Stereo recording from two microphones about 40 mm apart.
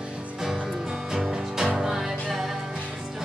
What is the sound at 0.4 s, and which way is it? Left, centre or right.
Music, centre.